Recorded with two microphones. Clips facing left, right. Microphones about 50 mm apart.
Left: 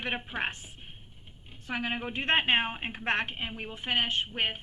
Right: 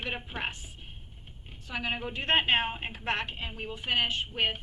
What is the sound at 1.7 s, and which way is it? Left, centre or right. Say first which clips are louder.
A woman's voice: left 1 dB; left.